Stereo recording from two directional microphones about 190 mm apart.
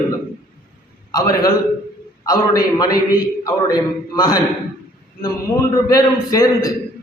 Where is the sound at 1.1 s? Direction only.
20° left (ahead or behind).